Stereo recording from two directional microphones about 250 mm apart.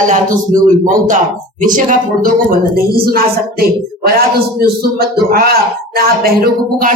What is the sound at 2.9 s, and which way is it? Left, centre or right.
Speech, right.